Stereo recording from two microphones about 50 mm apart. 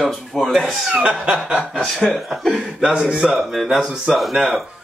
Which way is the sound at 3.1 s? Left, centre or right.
Centre.